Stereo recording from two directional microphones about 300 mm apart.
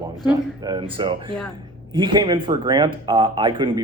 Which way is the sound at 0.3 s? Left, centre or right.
Centre.